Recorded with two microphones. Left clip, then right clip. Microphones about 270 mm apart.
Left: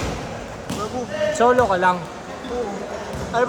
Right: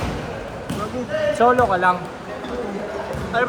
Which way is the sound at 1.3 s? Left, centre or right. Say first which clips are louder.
Even; left.